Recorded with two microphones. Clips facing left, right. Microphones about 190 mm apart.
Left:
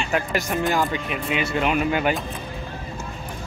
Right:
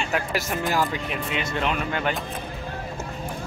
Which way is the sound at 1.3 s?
10° left (ahead or behind).